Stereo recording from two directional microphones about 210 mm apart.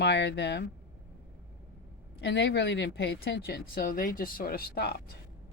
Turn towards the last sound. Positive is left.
turn(degrees=50)  # may be behind; listen again after turning